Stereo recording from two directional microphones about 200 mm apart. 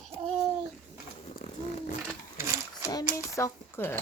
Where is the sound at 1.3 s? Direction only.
45° left (ahead or behind).